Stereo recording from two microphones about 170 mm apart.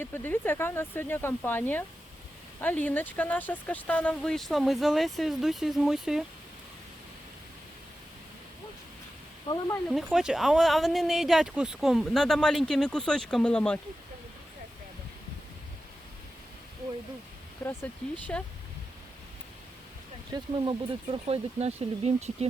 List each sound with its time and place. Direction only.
0.0 s speech: 10° left (ahead or behind)
9.9 s speech: centre (ahead or behind)
17.6 s speech: 5° left (ahead or behind)
20.3 s speech: 30° right (ahead or behind)